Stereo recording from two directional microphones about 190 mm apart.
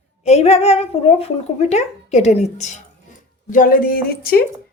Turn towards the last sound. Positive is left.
turn(degrees=50)  # may be behind; listen again after turning